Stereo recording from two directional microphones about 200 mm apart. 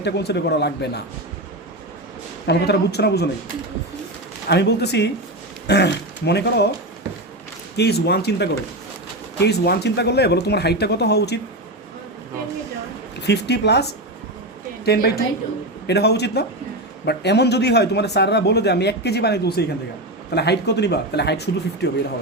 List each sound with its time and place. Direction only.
0.0 s a man's voice: 55° left (ahead or behind)
2.5 s a man's voice: 55° left (ahead or behind)
4.4 s a man's voice: 55° left (ahead or behind)
7.8 s a man's voice: 55° left (ahead or behind)
13.2 s a man's voice: 55° left (ahead or behind)
14.8 s a woman's voice: 50° left (ahead or behind)